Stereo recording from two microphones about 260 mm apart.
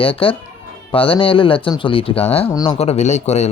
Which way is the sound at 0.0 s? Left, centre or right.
Left.